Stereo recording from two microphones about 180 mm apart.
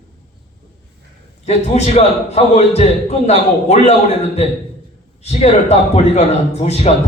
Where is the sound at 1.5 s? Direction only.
35° left (ahead or behind).